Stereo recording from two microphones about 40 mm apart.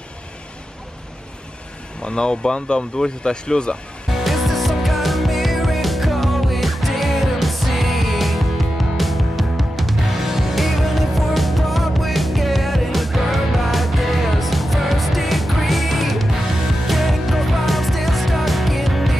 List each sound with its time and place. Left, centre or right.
2.0 s speech: left
4.2 s music: centre